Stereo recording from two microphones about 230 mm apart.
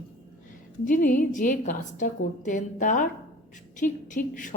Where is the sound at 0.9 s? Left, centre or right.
Left.